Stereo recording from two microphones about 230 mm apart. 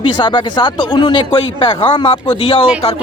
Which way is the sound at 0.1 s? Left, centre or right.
Centre.